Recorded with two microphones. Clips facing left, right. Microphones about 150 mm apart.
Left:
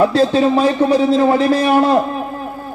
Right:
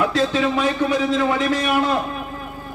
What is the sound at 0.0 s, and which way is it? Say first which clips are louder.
A man's voice: left 7 dB; 35° left (ahead or behind).